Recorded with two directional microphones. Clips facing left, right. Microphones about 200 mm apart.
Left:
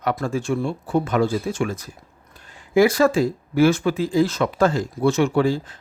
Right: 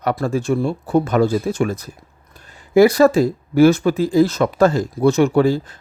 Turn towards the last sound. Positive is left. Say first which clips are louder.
# right 4 dB
turn(degrees=-40)  # may be behind; listen again after turning